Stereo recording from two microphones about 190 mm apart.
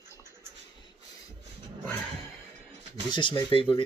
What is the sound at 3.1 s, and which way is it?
Speech, 25° left (ahead or behind).